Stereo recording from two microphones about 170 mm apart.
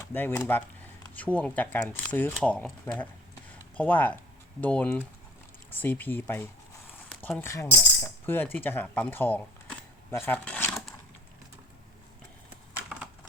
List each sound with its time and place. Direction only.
0.1 s speech: 10° left (ahead or behind)